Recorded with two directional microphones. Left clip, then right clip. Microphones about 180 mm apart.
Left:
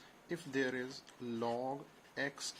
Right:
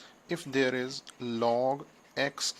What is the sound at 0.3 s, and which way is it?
Speech, 35° right (ahead or behind).